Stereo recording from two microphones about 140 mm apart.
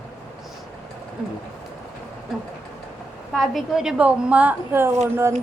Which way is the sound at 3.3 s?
Centre (ahead or behind).